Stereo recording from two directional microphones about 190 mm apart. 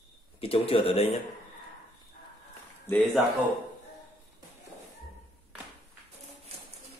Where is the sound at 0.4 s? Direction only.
30° left (ahead or behind).